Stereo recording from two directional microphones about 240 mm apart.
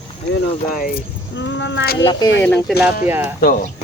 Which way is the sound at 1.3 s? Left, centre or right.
Left.